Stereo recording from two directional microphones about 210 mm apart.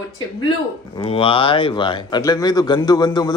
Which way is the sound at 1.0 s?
25° left (ahead or behind).